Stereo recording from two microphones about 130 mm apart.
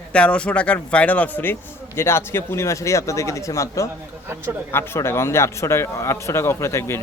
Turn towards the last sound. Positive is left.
turn(degrees=20)  # may be behind; listen again after turning